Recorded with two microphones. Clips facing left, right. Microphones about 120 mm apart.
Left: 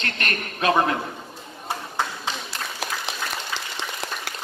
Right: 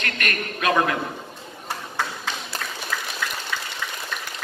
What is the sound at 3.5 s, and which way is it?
Frying, 25° left (ahead or behind).